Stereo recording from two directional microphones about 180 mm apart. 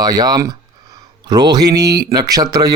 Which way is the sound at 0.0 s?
20° right (ahead or behind).